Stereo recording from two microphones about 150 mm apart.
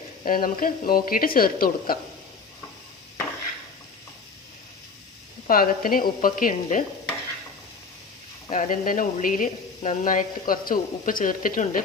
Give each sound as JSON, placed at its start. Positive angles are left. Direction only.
{"t": 0.3, "sound": "speech", "side_deg": 70}
{"t": 5.5, "sound": "speech", "side_deg": 70}
{"t": 8.4, "sound": "a woman's voice", "side_deg": 55}